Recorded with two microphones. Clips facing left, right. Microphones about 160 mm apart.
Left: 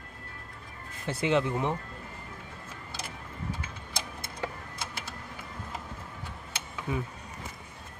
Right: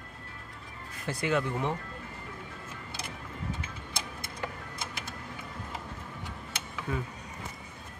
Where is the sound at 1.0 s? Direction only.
20° left (ahead or behind).